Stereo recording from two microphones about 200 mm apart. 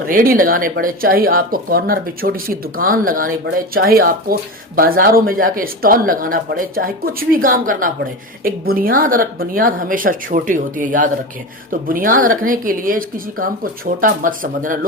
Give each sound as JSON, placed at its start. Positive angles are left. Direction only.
{"t": 0.1, "sound": "speech", "side_deg": -45}